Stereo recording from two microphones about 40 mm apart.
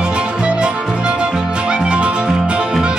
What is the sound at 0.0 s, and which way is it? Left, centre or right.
Music, right.